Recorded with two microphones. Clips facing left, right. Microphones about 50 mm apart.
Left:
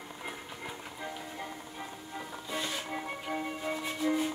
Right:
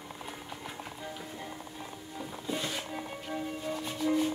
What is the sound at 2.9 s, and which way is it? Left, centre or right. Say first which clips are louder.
Music: left 2 dB; left.